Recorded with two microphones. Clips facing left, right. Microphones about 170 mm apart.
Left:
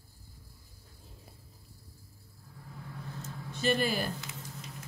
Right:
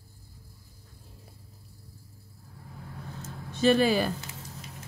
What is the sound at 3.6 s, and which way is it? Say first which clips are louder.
Speech: right 7 dB; 90° right.